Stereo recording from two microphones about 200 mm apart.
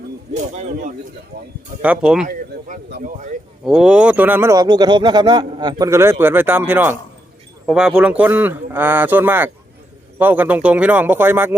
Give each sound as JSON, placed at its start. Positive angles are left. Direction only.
{"t": 0.3, "sound": "speech", "side_deg": -40}
{"t": 1.8, "sound": "speech", "side_deg": -5}
{"t": 2.2, "sound": "speech", "side_deg": -40}
{"t": 3.7, "sound": "speech", "side_deg": -5}